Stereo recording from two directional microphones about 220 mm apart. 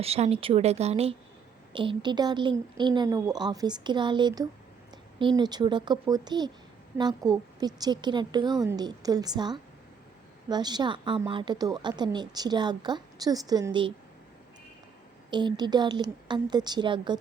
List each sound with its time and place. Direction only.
0.0 s a woman's voice: 25° right (ahead or behind)
15.3 s a woman's voice: 20° right (ahead or behind)